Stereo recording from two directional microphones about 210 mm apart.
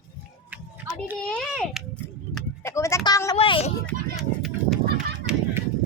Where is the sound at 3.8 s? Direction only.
Centre (ahead or behind).